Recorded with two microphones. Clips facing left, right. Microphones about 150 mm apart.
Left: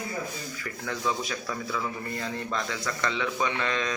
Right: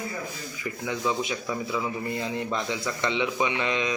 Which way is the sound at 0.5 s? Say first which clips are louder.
Right 7 dB; 10° right (ahead or behind).